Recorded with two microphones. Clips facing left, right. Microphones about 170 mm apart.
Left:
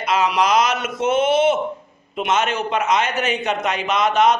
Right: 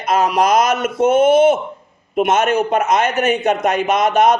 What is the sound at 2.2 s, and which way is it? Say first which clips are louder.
A man's voice: right 6 dB; 50° right (ahead or behind).